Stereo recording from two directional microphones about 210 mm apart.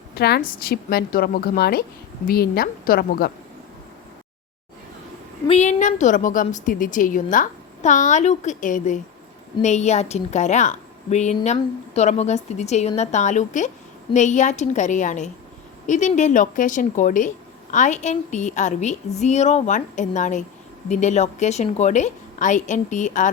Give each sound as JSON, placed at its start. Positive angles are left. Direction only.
{"t": 0.1, "sound": "a woman's voice", "side_deg": 50}
{"t": 5.5, "sound": "a woman's voice", "side_deg": 35}